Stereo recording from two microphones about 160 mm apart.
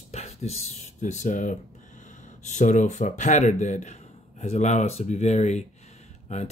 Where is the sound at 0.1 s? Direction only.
40° left (ahead or behind).